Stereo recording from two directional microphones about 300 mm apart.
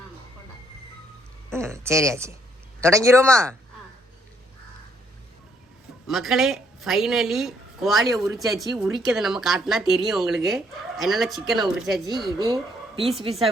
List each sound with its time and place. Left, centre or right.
1.5 s a sound: centre
2.8 s speech: centre
6.1 s a woman's voice: centre
12.1 s speech: centre